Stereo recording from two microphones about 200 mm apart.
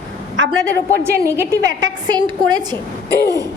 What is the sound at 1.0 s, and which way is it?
A woman's voice, 15° right (ahead or behind).